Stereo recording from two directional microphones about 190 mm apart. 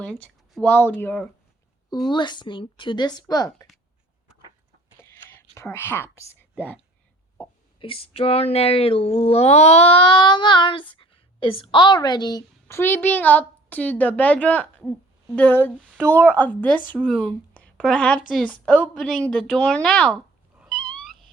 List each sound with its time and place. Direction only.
0.0 s speech: 5° left (ahead or behind)
2.0 s speech: 25° left (ahead or behind)
4.9 s whispering: 15° left (ahead or behind)
7.3 s a woman's voice: 25° left (ahead or behind); by 20.1 s 5° left (ahead or behind)
20.6 s cat: centre (ahead or behind)